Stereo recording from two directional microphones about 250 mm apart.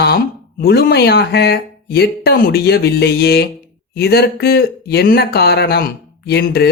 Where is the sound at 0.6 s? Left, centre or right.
Left.